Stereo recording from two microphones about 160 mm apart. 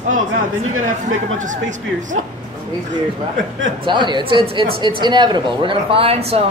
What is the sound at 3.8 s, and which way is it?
A man's voice, 30° right (ahead or behind).